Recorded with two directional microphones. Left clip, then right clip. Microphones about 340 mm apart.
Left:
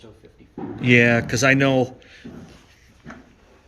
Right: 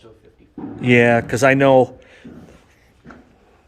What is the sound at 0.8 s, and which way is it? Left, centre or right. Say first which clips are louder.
Speech: right 2 dB; centre.